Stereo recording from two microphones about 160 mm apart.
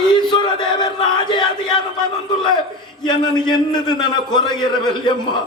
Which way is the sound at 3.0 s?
30° left (ahead or behind).